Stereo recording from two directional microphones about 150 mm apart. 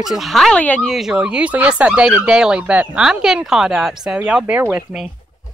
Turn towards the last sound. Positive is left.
turn(degrees=-5)  # may be behind; listen again after turning